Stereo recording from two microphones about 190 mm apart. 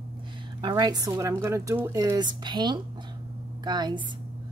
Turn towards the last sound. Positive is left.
turn(degrees=-20)  # may be behind; listen again after turning